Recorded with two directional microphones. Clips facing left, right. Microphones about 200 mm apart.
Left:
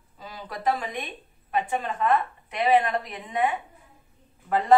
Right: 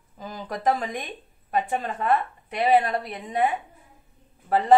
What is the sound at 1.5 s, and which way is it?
A woman's voice, 40° right (ahead or behind).